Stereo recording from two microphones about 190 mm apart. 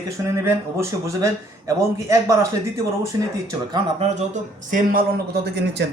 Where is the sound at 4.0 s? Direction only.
40° right (ahead or behind); by 5.8 s 60° right (ahead or behind).